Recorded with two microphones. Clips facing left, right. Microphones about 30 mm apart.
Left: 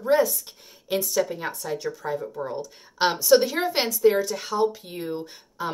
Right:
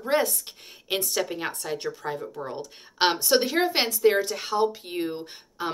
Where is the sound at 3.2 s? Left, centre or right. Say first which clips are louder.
Left 3 dB; centre.